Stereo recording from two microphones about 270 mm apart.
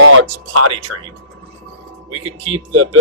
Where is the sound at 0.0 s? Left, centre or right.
Right.